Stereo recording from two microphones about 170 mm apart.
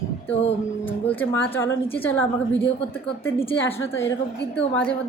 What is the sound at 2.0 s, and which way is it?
A woman's voice, 10° left (ahead or behind).